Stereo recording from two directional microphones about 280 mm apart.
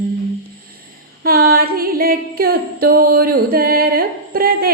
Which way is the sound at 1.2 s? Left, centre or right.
Right.